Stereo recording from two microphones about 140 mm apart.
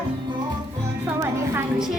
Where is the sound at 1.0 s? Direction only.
15° right (ahead or behind).